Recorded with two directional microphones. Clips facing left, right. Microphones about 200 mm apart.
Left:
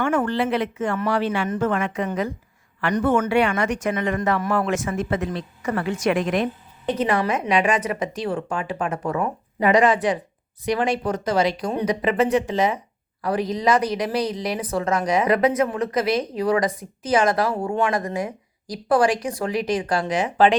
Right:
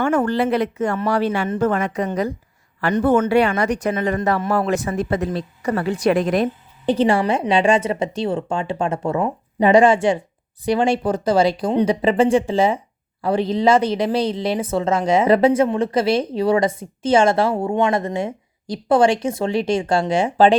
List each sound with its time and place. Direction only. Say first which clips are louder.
0.0 s speech: right 3 dB; 40° right (ahead or behind)